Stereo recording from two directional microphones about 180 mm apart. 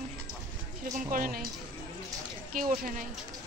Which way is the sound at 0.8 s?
45° right (ahead or behind).